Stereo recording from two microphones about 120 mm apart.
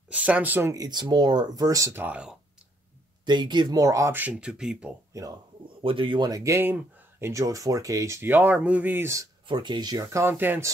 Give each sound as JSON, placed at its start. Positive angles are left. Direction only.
{"t": 0.1, "sound": "speech", "side_deg": -10}
{"t": 0.7, "sound": "speech", "side_deg": -35}
{"t": 3.3, "sound": "speech", "side_deg": -40}
{"t": 4.2, "sound": "speech", "side_deg": -10}
{"t": 5.1, "sound": "speech", "side_deg": -25}
{"t": 5.8, "sound": "speech", "side_deg": -45}
{"t": 9.5, "sound": "speech", "side_deg": -40}
{"t": 10.2, "sound": "speech", "side_deg": -15}